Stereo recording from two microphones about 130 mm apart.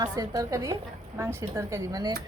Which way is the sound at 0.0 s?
25° right (ahead or behind).